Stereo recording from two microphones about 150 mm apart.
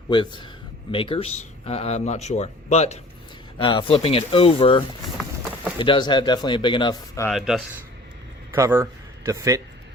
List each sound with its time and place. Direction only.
0.1 s a man's voice: 35° left (ahead or behind); by 3.0 s 50° left (ahead or behind)
3.6 s speech: 35° left (ahead or behind)
5.8 s speech: 30° left (ahead or behind)
7.3 s speech: centre (ahead or behind)
8.5 s a man's voice: 20° right (ahead or behind)